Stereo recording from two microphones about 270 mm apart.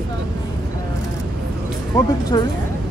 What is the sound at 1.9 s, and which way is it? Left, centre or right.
Speech, centre.